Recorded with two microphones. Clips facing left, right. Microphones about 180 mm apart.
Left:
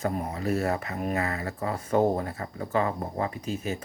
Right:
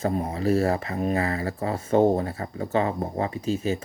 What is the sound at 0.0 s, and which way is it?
Speech, 25° right (ahead or behind).